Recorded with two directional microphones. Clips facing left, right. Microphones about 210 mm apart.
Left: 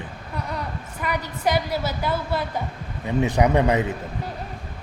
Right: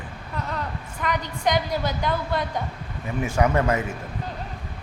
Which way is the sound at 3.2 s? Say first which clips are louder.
Left 3 dB; 20° left (ahead or behind).